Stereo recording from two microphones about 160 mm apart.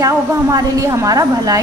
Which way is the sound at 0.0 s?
20° right (ahead or behind).